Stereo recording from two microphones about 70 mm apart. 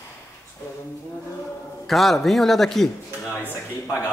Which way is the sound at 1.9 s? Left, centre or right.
Centre.